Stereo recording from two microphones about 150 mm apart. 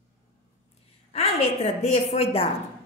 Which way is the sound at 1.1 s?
45° left (ahead or behind).